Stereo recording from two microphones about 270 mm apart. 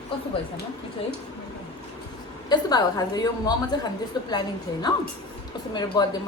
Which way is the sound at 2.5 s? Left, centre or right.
Centre.